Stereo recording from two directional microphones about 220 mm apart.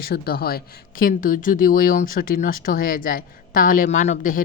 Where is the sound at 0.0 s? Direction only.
45° left (ahead or behind).